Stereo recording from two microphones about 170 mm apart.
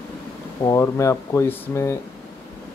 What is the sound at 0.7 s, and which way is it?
Speech, 15° left (ahead or behind).